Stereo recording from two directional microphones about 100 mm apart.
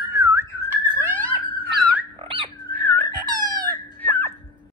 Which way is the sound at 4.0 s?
20° left (ahead or behind).